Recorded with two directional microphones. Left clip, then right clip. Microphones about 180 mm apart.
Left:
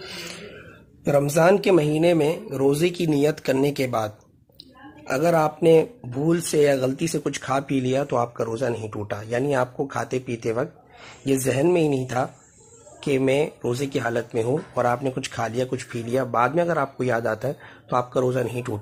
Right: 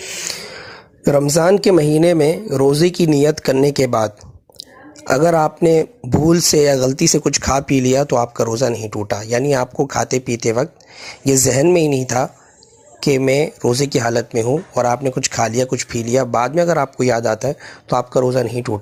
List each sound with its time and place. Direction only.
1.3 s speech: 45° right (ahead or behind)
2.5 s speech: 35° right (ahead or behind)
3.4 s speech: 50° right (ahead or behind); by 18.8 s 30° right (ahead or behind)